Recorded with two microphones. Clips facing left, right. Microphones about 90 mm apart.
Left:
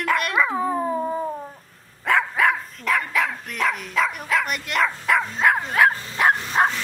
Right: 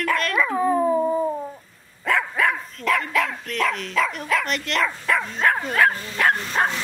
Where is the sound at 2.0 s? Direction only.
20° left (ahead or behind).